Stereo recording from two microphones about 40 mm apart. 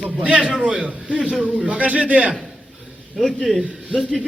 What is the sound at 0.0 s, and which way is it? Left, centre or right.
A man's voice, right.